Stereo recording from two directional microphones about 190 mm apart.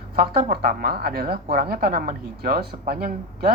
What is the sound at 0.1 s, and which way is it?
A woman's voice, 55° right (ahead or behind).